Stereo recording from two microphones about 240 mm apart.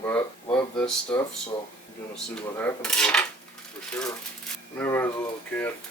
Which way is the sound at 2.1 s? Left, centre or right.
Centre.